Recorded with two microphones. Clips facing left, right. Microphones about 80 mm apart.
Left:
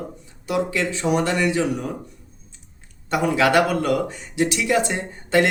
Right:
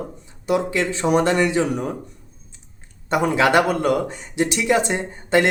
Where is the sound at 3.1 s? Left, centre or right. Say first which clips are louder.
Right 1 dB; right.